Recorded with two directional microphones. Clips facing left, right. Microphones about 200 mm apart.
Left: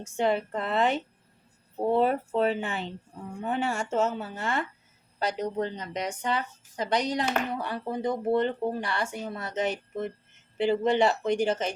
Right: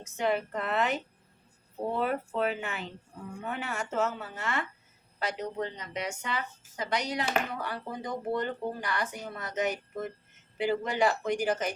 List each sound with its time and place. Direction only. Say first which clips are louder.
0.0 s speech: left 3 dB; 30° left (ahead or behind)